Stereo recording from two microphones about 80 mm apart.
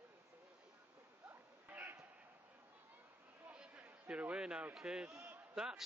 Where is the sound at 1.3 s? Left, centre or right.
Right.